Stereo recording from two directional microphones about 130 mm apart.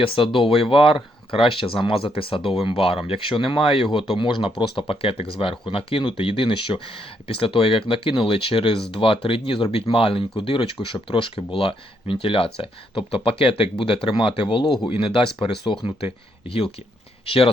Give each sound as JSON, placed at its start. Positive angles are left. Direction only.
{"t": 0.0, "sound": "speech", "side_deg": 40}